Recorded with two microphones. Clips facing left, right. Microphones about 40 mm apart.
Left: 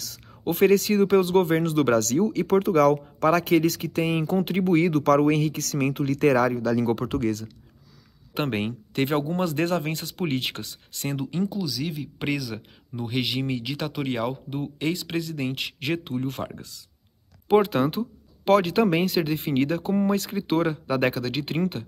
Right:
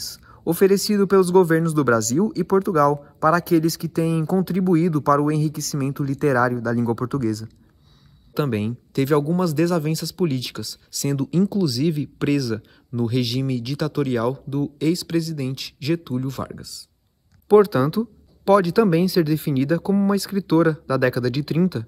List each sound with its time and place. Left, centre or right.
0.4 s speech: left
11.1 s speech: centre
12.2 s speech: centre; by 21.8 s left